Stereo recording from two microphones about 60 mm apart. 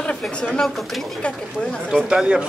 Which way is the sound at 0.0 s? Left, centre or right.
Centre.